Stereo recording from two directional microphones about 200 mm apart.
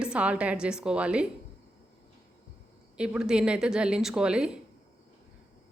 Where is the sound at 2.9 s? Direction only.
5° right (ahead or behind).